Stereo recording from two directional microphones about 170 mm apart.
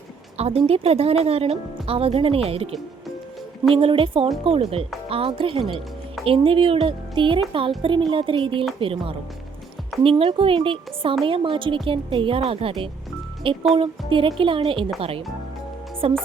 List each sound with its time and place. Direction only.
0.3 s speech: 35° right (ahead or behind)
3.8 s speech: 30° right (ahead or behind)